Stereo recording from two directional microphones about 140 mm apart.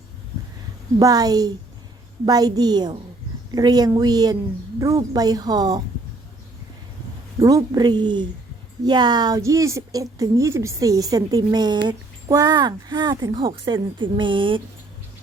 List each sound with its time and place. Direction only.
0.9 s a woman's voice: 25° right (ahead or behind)
7.3 s a woman's voice: 25° right (ahead or behind)